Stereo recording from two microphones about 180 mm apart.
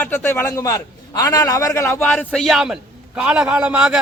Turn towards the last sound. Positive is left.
turn(degrees=-5)  # may be behind; listen again after turning